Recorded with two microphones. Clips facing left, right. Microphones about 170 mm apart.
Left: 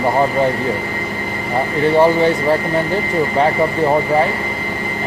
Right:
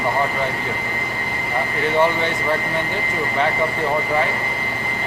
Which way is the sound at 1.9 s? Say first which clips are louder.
Left 6 dB; 35° left (ahead or behind).